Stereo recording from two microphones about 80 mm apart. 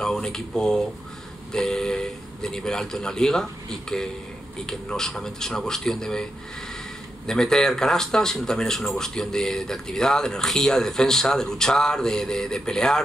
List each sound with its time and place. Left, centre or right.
0.0 s speech: centre
7.2 s speech: centre